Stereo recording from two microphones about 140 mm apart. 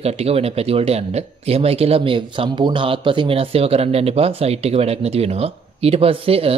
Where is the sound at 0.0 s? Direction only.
45° right (ahead or behind).